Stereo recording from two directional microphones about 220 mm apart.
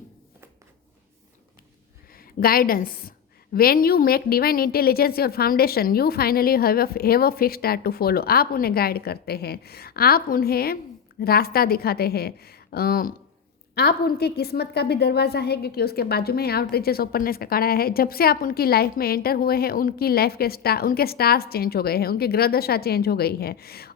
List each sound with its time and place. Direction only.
2.1 s a woman's voice: 40° left (ahead or behind)